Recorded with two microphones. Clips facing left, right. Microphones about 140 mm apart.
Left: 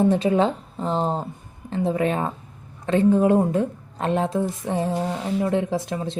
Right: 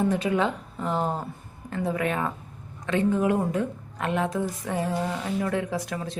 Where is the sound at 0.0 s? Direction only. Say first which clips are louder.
Left 5 dB; 30° left (ahead or behind).